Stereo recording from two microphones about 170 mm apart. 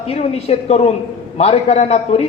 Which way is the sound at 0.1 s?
40° left (ahead or behind).